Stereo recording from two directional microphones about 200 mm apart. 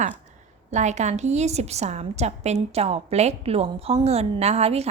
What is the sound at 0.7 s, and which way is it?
A woman's voice, 35° right (ahead or behind).